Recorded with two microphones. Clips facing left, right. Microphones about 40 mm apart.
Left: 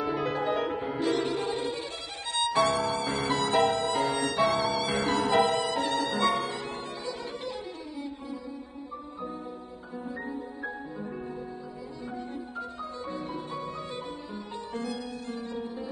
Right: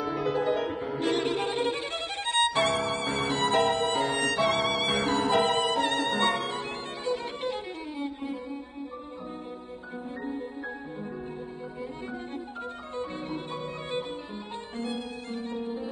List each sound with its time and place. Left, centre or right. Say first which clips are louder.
0.0 s music: right 1 dB; centre
0.9 s music: right 2 dB; right
2.2 s violin: even; right
5.3 s music: even; right
13.1 s music: even; right